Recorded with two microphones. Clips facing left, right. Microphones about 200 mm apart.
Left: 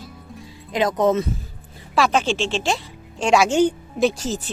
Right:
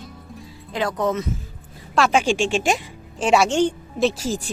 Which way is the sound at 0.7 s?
20° left (ahead or behind).